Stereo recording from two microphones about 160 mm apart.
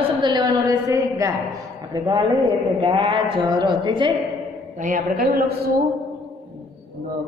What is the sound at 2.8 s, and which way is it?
A woman's voice, 30° right (ahead or behind).